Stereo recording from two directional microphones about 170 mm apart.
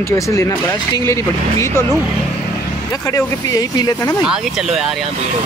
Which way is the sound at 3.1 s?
20° left (ahead or behind).